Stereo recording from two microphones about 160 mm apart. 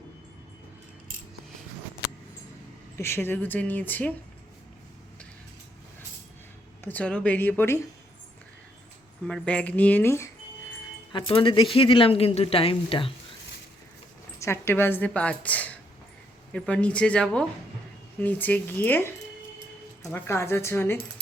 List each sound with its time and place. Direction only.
3.0 s a woman's voice: 15° left (ahead or behind)
6.8 s a woman's voice: 10° left (ahead or behind)
9.2 s a woman's voice: 5° left (ahead or behind)
11.1 s speech: 30° left (ahead or behind)
14.3 s a woman's voice: 15° left (ahead or behind)